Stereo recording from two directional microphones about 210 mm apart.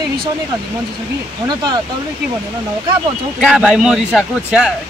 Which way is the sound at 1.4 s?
20° right (ahead or behind).